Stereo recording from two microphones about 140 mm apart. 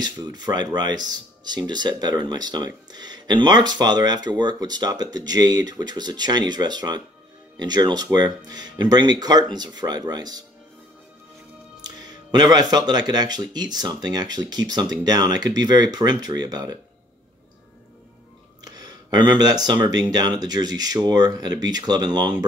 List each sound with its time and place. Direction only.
0.0 s speech: 30° right (ahead or behind)
11.8 s speech: 30° right (ahead or behind)
18.6 s speech: 30° right (ahead or behind)